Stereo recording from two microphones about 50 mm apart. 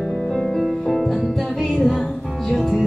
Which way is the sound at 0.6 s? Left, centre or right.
Centre.